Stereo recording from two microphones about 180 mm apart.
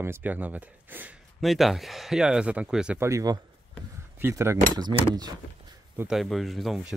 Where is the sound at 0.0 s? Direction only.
10° right (ahead or behind).